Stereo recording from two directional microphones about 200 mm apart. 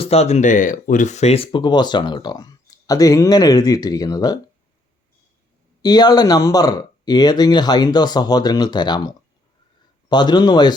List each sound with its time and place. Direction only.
0.0 s speech: 30° left (ahead or behind)
5.8 s speech: 20° left (ahead or behind)